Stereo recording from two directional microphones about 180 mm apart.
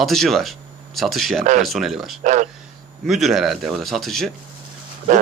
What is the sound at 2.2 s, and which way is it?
Speech, 40° right (ahead or behind).